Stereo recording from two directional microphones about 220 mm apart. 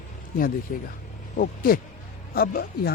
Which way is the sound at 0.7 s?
35° left (ahead or behind).